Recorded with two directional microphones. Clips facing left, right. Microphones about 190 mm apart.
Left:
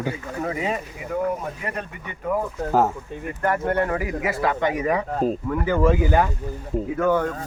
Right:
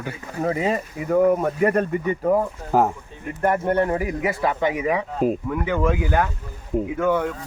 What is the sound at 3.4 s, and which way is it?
A man's voice, 20° right (ahead or behind).